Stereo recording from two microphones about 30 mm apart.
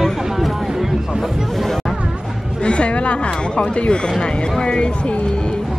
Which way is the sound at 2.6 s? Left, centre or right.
Left.